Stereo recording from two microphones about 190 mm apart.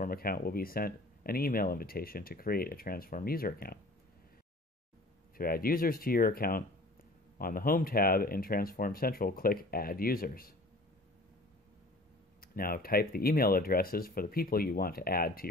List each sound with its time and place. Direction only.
0.0 s speech: 50° left (ahead or behind)
5.4 s speech: 50° left (ahead or behind)
12.4 s speech: 50° left (ahead or behind)